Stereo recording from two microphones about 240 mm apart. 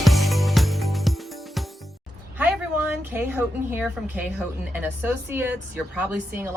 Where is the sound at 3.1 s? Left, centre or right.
Centre.